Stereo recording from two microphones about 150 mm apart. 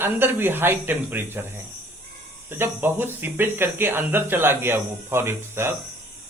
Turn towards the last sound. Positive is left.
turn(degrees=-15)  # may be behind; listen again after turning